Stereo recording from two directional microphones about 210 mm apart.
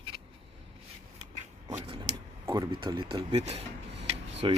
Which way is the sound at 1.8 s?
25° right (ahead or behind).